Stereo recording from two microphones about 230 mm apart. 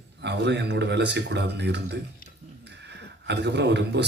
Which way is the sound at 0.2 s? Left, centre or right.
Right.